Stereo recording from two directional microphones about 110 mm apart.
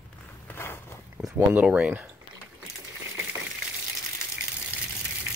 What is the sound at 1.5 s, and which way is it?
Speech, 10° right (ahead or behind).